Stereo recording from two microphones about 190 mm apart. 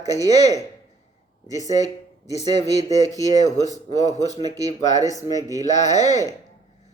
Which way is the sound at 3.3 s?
40° left (ahead or behind).